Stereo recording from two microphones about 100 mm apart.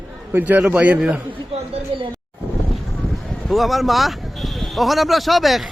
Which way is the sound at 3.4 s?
Centre (ahead or behind).